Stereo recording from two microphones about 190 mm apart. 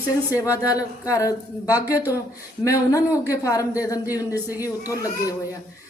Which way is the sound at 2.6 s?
15° left (ahead or behind).